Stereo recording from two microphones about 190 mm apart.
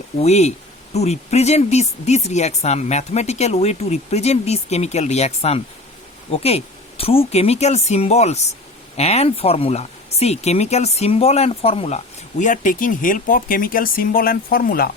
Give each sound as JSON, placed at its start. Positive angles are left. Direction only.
{"t": 0.2, "sound": "speech", "side_deg": 35}